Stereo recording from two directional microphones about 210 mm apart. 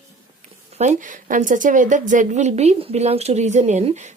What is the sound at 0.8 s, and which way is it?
A woman's voice, 35° right (ahead or behind).